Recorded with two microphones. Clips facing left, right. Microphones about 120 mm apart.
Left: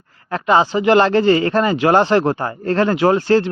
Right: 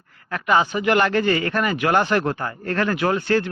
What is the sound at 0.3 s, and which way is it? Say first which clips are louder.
Speech: left 4 dB; 30° left (ahead or behind).